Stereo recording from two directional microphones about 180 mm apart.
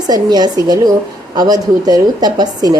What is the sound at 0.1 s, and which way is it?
Speech, 20° right (ahead or behind).